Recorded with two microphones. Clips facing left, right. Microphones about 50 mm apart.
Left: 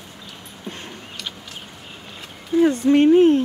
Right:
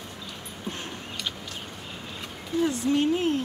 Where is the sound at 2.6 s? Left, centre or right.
Left.